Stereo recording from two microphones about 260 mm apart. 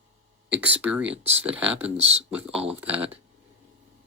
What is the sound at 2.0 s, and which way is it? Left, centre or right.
Speech, right.